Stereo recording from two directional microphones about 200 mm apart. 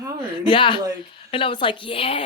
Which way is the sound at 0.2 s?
25° left (ahead or behind).